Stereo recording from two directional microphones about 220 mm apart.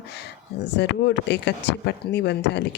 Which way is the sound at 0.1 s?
50° left (ahead or behind).